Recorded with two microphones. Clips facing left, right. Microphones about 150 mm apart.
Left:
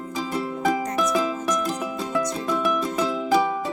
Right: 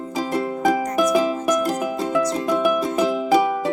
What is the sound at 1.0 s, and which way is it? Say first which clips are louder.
Music: right 5 dB; 20° right (ahead or behind).